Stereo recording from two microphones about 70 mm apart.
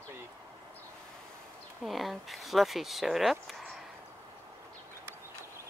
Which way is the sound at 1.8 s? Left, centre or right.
Centre.